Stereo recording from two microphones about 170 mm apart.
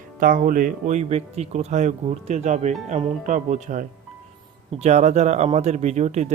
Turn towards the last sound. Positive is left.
turn(degrees=-45)  # may be behind; listen again after turning